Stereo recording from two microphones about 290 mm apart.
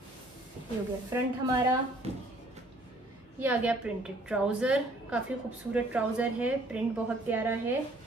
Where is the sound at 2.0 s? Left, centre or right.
Right.